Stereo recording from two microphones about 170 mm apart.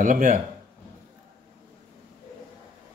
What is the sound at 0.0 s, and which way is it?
Speech, 50° right (ahead or behind).